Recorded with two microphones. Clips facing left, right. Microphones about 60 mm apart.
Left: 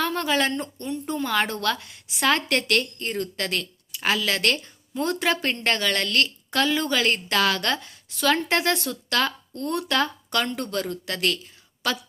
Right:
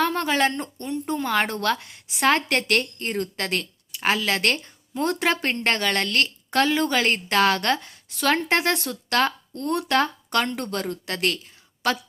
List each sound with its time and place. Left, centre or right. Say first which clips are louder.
0.0 s a woman's voice: right 2 dB; right